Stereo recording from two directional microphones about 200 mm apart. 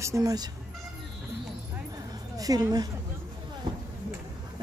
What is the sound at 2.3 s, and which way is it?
Speech, 20° right (ahead or behind).